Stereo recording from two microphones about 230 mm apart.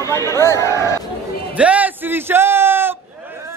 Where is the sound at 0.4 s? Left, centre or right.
Centre.